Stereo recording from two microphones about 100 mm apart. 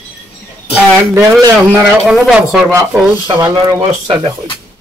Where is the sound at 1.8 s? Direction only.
Centre (ahead or behind).